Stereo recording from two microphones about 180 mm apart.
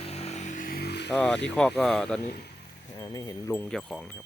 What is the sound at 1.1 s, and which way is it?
Speech, 5° left (ahead or behind).